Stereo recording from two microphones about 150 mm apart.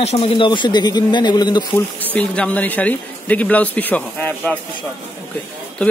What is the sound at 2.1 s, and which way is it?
A man's voice, 10° left (ahead or behind).